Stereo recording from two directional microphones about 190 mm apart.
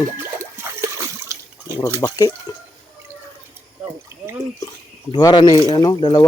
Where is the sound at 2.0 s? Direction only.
20° left (ahead or behind).